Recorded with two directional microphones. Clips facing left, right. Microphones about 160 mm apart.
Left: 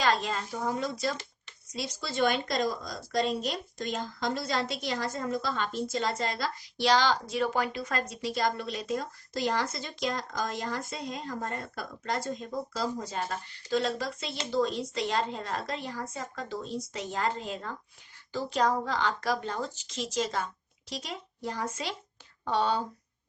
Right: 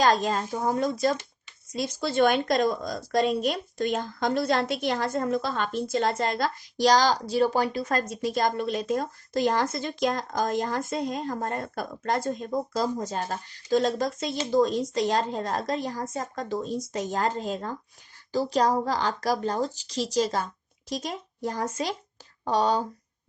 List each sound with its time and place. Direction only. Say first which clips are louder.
0.0 s a woman's voice: right 5 dB; 45° right (ahead or behind)